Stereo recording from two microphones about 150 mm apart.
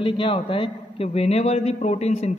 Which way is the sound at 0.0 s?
35° left (ahead or behind).